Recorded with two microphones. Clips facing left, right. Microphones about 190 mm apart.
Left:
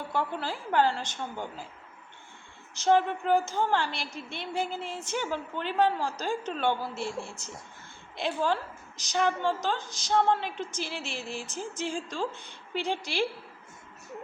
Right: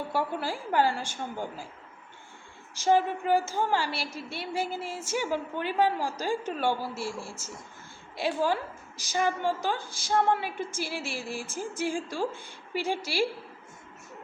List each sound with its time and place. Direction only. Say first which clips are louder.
0.1 s a woman's voice: even; 10° right (ahead or behind)
2.7 s a woman's voice: even; 10° right (ahead or behind)
8.1 s a woman's voice: right 1 dB; 10° right (ahead or behind)